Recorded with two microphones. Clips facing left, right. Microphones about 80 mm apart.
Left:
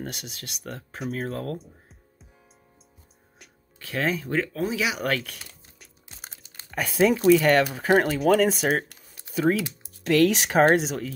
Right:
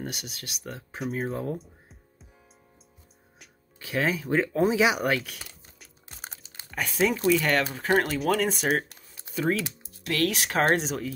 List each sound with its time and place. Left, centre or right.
0.0 s speech: centre
3.8 s speech: centre
4.5 s speech: right
4.9 s speech: centre
8.2 s speech: centre
10.0 s speech: left
10.7 s speech: centre